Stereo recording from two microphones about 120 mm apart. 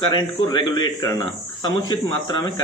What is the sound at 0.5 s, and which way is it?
A man's voice, 40° left (ahead or behind).